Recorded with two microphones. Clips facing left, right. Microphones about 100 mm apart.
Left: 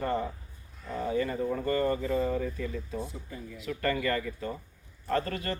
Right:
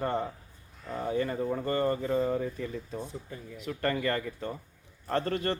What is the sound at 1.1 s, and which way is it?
Speech, 35° right (ahead or behind).